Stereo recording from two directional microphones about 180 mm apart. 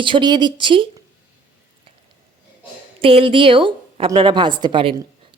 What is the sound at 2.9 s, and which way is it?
A woman's voice, 30° right (ahead or behind).